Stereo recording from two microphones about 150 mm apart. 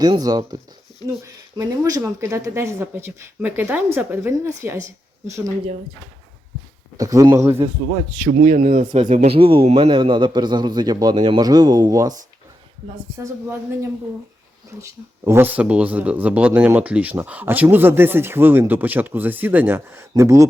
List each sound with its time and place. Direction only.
0.0 s a man's voice: 25° right (ahead or behind)
6.9 s a man's voice: 25° right (ahead or behind)
8.3 s speech: 60° right (ahead or behind)
9.3 s a man's voice: 40° right (ahead or behind)
13.2 s speech: 15° right (ahead or behind)